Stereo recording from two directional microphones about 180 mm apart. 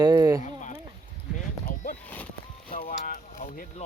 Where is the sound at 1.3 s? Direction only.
45° left (ahead or behind).